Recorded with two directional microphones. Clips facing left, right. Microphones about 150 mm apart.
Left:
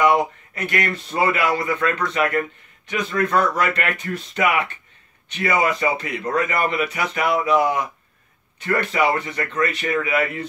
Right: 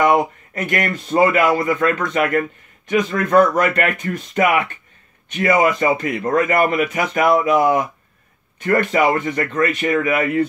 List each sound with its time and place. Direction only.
0.7 s speech: 45° right (ahead or behind)